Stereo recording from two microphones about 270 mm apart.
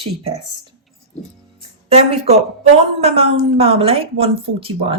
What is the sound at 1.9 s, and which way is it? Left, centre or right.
Speech, right.